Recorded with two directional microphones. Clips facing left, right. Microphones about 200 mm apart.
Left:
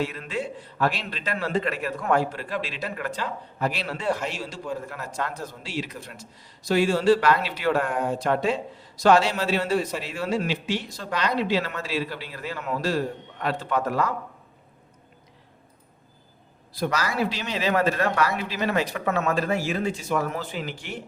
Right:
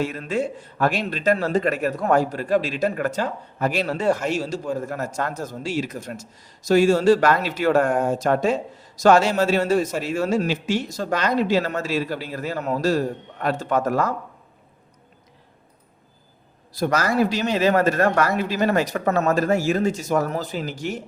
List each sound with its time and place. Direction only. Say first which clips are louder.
0.0 s a man's voice: right 5 dB; 45° right (ahead or behind)
16.7 s a man's voice: right 6 dB; 45° right (ahead or behind)